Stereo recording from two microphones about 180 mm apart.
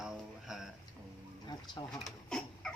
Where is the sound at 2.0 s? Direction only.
5° left (ahead or behind).